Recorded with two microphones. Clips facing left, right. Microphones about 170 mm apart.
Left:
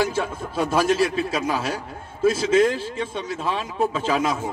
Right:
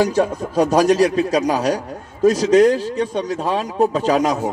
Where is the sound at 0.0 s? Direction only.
40° right (ahead or behind).